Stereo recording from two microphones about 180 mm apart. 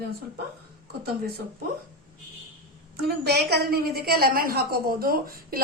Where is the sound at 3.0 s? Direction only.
65° right (ahead or behind).